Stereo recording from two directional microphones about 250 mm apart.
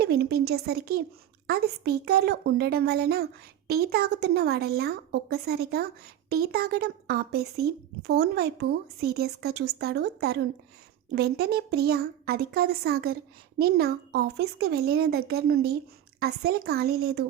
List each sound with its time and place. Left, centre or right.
0.0 s speech: right